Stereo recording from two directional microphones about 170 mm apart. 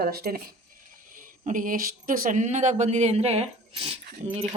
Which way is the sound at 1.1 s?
50° right (ahead or behind).